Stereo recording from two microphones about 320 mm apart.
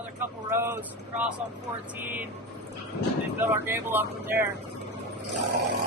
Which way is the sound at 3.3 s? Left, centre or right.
Centre.